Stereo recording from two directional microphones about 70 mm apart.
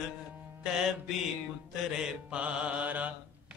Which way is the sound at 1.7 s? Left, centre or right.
Centre.